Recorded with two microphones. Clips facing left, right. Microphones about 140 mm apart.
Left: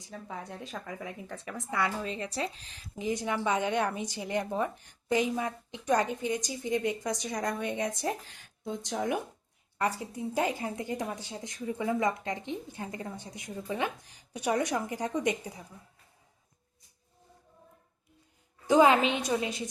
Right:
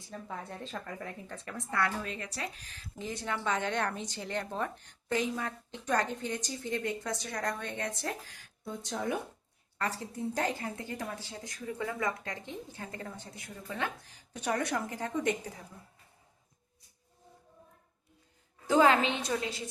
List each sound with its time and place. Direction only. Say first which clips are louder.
0.1 s a woman's voice: left 1 dB; 5° left (ahead or behind); by 2.6 s 25° left (ahead or behind)
3.0 s a woman's voice: left 5 dB; 15° left (ahead or behind)
8.3 s a sound: left 4 dB; 25° left (ahead or behind)
8.9 s a woman's voice: left 2 dB; 15° left (ahead or behind)
18.7 s a woman's voice: left 3 dB; 15° left (ahead or behind)